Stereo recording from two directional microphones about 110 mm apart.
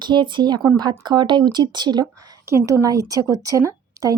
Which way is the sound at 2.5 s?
25° right (ahead or behind).